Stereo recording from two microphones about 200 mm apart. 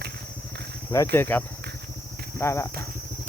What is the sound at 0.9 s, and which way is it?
Speech, 15° left (ahead or behind).